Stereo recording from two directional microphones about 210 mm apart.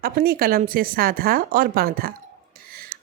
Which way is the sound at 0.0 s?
45° right (ahead or behind).